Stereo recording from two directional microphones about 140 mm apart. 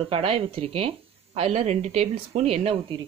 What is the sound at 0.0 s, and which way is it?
Speech, 45° right (ahead or behind).